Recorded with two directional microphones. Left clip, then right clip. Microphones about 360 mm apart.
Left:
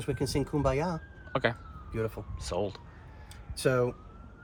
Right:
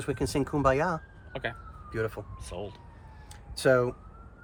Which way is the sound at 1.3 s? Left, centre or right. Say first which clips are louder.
Left 6 dB; left.